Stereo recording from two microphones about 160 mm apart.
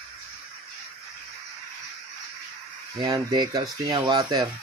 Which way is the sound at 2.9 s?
25° right (ahead or behind).